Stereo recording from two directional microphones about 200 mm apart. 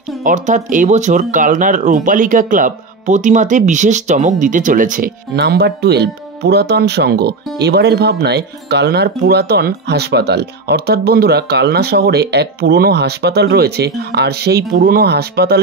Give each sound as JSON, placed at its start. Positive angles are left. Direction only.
{"t": 0.2, "sound": "speech", "side_deg": -40}